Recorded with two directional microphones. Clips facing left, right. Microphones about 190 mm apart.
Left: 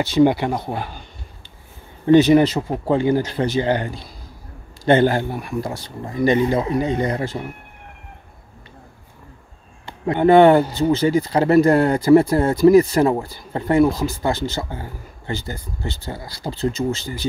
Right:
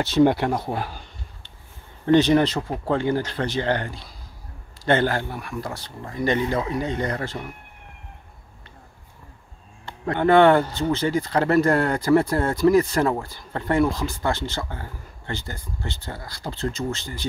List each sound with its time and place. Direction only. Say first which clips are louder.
0.0 s speech: left 2 dB; centre (ahead or behind)
2.1 s speech: left 5 dB; 5° left (ahead or behind)
9.8 s speech: left 5 dB; 15° left (ahead or behind)